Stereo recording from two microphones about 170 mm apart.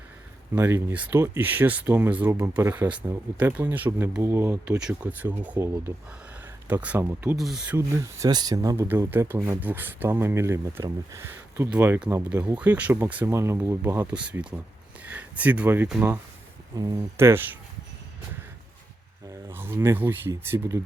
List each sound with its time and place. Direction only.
0.5 s speech: 15° right (ahead or behind)
8.2 s speech: 25° right (ahead or behind)
16.7 s speech: 20° right (ahead or behind)
19.3 s speech: 15° right (ahead or behind)